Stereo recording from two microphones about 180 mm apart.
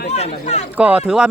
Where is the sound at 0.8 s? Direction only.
5° right (ahead or behind).